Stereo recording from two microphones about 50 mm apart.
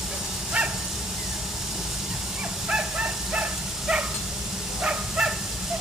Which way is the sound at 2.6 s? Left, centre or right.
Centre.